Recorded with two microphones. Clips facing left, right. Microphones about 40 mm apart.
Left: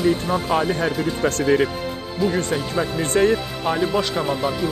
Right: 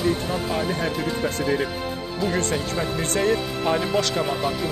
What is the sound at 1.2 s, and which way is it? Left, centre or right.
Speech, left.